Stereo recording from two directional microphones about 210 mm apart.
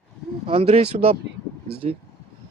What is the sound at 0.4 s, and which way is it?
Speech, 30° right (ahead or behind).